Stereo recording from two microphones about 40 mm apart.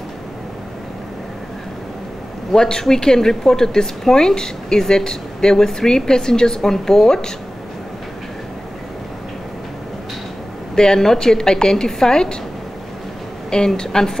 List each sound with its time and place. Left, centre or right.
2.5 s a woman's voice: centre
10.8 s a woman's voice: centre
13.7 s a woman's voice: centre